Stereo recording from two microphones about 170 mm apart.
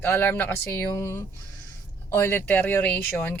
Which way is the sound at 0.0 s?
10° left (ahead or behind).